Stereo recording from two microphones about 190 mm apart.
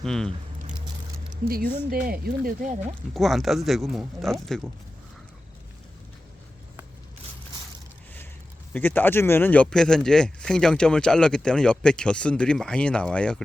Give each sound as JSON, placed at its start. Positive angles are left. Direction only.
{"t": 0.0, "sound": "speech", "side_deg": 5}
{"t": 1.3, "sound": "speech", "side_deg": -50}
{"t": 3.2, "sound": "speech", "side_deg": 0}
{"t": 8.7, "sound": "speech", "side_deg": 10}